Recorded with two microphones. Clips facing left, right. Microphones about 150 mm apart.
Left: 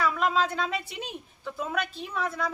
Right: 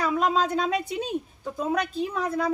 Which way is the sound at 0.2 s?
40° right (ahead or behind).